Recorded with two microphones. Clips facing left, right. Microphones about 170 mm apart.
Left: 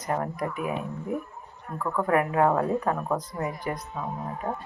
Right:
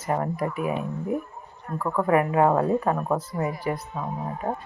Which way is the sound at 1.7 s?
5° right (ahead or behind).